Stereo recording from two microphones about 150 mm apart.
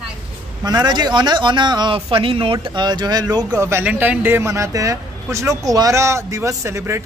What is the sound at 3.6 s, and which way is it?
Speech, 15° right (ahead or behind).